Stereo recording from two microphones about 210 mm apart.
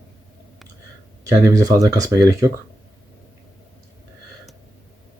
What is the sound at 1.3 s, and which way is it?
Speech, 15° right (ahead or behind).